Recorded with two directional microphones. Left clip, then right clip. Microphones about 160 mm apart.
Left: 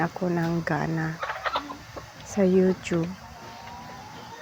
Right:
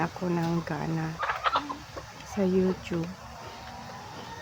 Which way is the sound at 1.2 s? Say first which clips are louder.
Right 3 dB; 35° left (ahead or behind).